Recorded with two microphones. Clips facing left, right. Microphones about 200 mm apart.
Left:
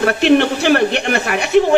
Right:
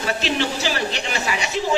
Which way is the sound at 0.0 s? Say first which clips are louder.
Left 11 dB; 60° left (ahead or behind).